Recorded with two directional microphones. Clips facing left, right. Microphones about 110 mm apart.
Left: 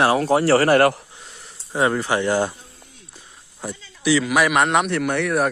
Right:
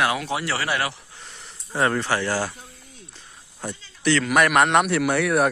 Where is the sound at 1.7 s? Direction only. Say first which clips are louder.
Left 2 dB; 10° left (ahead or behind).